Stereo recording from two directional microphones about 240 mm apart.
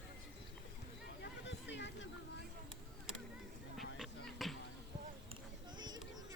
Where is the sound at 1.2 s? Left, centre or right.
Left.